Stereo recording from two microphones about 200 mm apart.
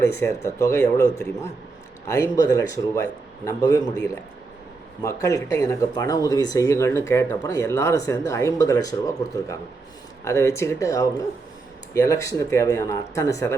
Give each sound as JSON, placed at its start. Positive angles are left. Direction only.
{"t": 0.0, "sound": "speech", "side_deg": 15}
{"t": 2.3, "sound": "speech", "side_deg": 15}